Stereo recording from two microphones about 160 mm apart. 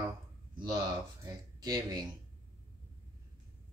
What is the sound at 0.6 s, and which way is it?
Speech, 30° right (ahead or behind).